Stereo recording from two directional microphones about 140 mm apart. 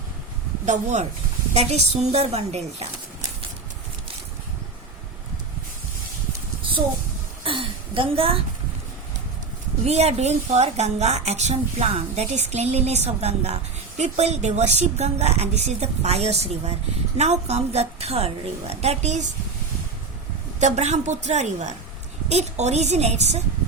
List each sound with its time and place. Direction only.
0.6 s a woman's voice: 60° right (ahead or behind)
7.4 s a sound: 40° right (ahead or behind)
9.8 s a woman's voice: 50° right (ahead or behind)
20.6 s a woman's voice: 55° right (ahead or behind)